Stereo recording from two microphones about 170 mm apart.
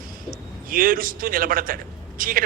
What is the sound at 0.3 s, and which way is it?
A man's voice, 55° right (ahead or behind).